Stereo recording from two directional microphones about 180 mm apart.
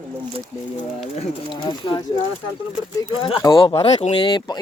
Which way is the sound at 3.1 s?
30° left (ahead or behind).